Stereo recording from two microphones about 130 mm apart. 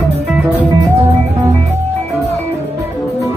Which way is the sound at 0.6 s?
15° right (ahead or behind).